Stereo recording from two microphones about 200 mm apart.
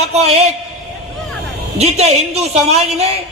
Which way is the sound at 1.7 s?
30° right (ahead or behind).